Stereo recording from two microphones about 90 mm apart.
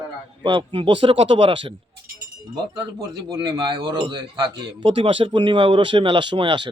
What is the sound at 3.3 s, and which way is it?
Speech, 50° right (ahead or behind).